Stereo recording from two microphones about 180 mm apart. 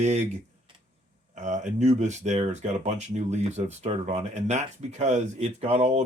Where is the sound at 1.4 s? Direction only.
45° right (ahead or behind).